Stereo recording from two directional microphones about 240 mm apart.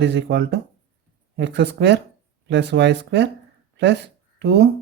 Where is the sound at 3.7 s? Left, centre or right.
Right.